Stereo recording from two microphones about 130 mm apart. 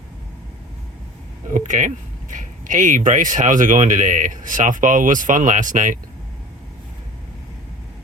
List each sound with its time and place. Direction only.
1.5 s speech: 75° right (ahead or behind)